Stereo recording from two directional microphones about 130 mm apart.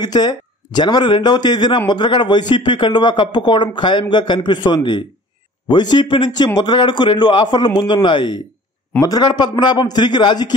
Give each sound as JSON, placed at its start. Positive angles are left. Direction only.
{"t": 0.0, "sound": "a man's voice", "side_deg": 35}